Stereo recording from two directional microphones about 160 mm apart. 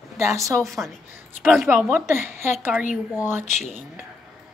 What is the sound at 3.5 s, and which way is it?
Speech, 45° left (ahead or behind).